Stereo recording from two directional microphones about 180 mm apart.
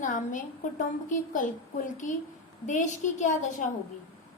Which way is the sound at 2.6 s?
45° left (ahead or behind).